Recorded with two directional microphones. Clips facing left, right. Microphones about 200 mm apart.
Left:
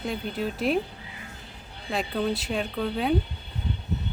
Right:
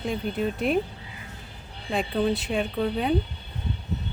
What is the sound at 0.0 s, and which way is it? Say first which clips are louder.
Speech: right 2 dB; centre (ahead or behind).